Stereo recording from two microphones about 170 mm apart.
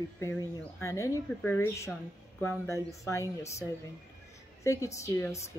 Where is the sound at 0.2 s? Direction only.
15° left (ahead or behind).